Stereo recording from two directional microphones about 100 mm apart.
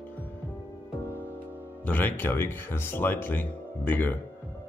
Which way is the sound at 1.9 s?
20° left (ahead or behind).